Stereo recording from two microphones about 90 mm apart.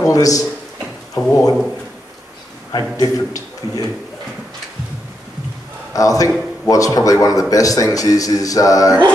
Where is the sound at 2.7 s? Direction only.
45° left (ahead or behind).